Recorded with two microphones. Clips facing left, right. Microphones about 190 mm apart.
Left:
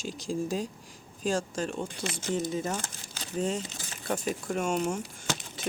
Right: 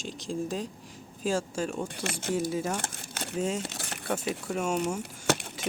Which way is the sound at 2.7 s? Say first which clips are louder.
Right 3 dB; 65° right (ahead or behind).